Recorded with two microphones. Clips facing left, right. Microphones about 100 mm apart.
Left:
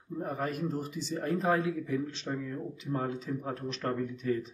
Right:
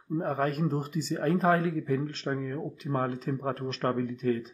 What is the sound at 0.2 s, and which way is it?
Speech, 55° right (ahead or behind).